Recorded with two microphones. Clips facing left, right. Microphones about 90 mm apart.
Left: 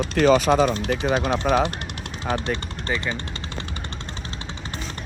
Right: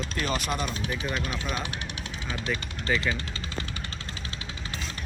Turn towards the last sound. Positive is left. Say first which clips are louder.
# left 1 dB
turn(degrees=25)  # may be behind; listen again after turning